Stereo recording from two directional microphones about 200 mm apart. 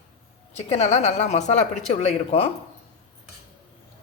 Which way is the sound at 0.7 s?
35° left (ahead or behind).